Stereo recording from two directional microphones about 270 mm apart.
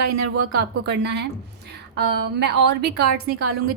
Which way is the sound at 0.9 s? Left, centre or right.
Right.